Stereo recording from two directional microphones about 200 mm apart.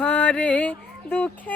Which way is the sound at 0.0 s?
5° left (ahead or behind).